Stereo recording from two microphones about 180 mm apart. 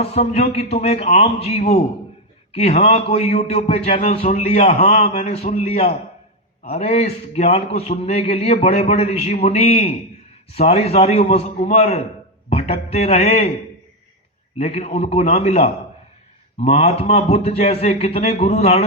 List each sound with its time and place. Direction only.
0.0 s a man's voice: 35° left (ahead or behind)
14.6 s a man's voice: 35° left (ahead or behind)